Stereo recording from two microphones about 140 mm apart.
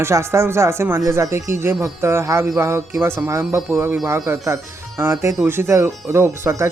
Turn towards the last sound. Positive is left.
turn(degrees=-20)  # may be behind; listen again after turning